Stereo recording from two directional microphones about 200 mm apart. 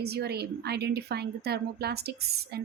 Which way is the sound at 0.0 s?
55° right (ahead or behind).